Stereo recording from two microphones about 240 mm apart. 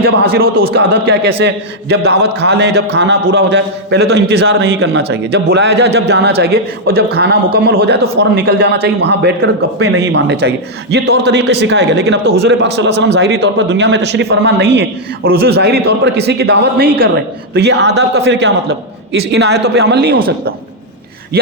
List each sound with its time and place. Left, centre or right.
0.0 s a man's voice: right
12.2 s a man's voice: right
12.5 s a man's voice: right